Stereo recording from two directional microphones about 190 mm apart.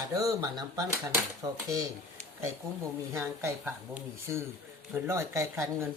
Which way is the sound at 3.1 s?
15° right (ahead or behind).